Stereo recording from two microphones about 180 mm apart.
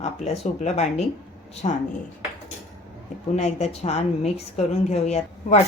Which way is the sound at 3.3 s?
40° left (ahead or behind).